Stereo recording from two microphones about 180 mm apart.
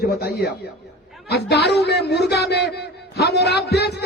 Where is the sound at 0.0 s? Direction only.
60° left (ahead or behind).